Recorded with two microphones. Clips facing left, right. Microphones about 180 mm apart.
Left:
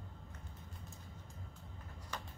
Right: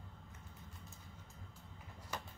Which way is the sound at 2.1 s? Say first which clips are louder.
Right 1 dB; 10° right (ahead or behind).